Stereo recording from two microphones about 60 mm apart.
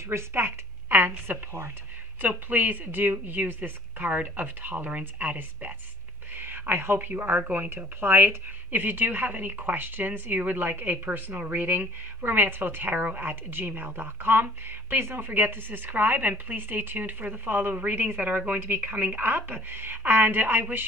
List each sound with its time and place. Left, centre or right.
0.1 s a woman's voice: right